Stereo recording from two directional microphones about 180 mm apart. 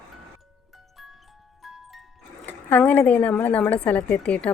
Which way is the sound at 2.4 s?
10° left (ahead or behind).